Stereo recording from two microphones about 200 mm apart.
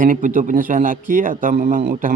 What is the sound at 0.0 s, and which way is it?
Speech, 40° right (ahead or behind).